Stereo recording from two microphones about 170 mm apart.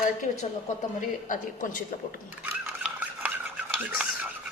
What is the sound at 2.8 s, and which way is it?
Stir, 10° right (ahead or behind).